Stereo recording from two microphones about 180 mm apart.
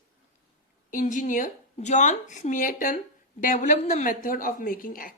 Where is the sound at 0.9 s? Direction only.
45° left (ahead or behind).